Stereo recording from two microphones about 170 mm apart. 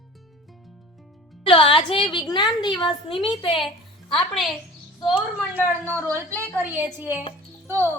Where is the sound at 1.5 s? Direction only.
30° left (ahead or behind).